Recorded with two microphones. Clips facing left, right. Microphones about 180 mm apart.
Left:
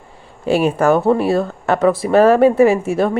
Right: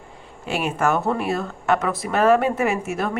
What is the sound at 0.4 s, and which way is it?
A woman's voice, 35° left (ahead or behind).